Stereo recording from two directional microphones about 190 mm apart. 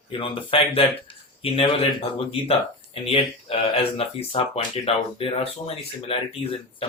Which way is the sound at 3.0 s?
30° left (ahead or behind).